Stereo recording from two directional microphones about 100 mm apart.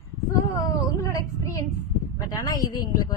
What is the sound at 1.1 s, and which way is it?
A woman's voice, 35° left (ahead or behind).